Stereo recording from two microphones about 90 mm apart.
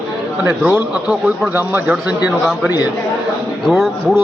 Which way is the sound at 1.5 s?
20° right (ahead or behind).